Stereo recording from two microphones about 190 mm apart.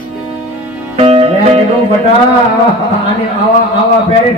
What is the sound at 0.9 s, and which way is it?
Music, 30° right (ahead or behind).